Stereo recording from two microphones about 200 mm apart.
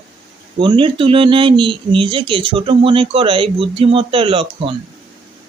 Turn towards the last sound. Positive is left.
turn(degrees=-25)  # may be behind; listen again after turning